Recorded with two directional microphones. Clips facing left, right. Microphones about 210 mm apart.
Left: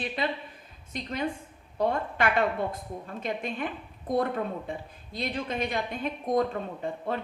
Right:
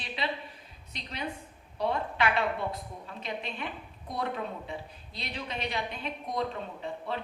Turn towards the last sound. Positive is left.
turn(degrees=50)  # may be behind; listen again after turning